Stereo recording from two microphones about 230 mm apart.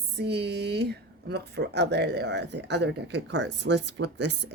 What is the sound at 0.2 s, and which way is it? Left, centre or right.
Speech, right.